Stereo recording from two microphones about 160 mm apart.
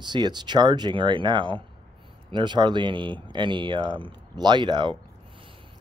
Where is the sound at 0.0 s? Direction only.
30° right (ahead or behind).